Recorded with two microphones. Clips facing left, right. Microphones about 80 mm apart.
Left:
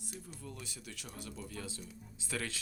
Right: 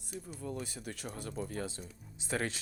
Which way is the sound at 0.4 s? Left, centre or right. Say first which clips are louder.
Right 8 dB; right.